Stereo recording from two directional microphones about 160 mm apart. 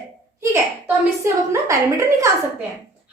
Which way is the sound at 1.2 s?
15° right (ahead or behind).